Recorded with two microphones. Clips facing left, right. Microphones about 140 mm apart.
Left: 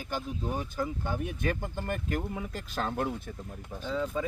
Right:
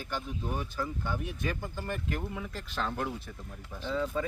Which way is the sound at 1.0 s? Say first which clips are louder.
Left 3 dB; 50° left (ahead or behind).